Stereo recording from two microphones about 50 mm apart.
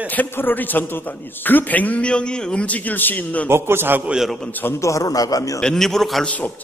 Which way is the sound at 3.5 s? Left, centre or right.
Right.